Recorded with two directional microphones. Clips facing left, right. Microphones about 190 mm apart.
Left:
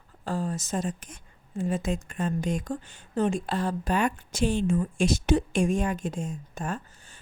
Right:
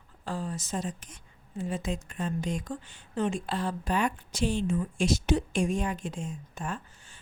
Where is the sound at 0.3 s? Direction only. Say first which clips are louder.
Left 4 dB; 45° left (ahead or behind).